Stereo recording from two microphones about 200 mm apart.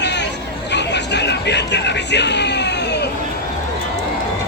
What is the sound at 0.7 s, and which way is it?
Music, 60° left (ahead or behind).